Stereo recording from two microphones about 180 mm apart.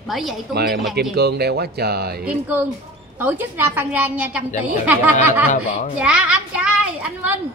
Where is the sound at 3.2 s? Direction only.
10° right (ahead or behind).